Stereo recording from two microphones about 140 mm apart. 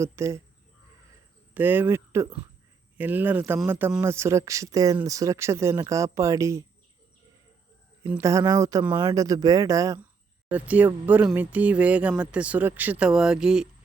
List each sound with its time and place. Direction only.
0.0 s speech: 20° right (ahead or behind)
1.5 s speech: 15° right (ahead or behind)
8.2 s speech: 25° right (ahead or behind)
10.5 s speech: 10° right (ahead or behind)